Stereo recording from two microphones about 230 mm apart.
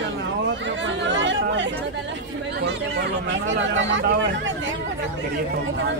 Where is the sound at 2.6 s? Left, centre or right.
Right.